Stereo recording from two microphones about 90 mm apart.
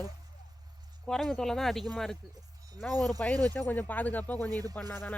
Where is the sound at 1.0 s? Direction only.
5° left (ahead or behind).